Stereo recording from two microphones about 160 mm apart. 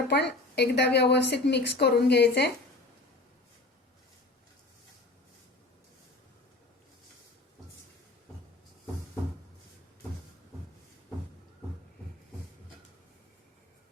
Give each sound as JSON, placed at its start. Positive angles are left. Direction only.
{"t": 0.1, "sound": "a woman's voice", "side_deg": 90}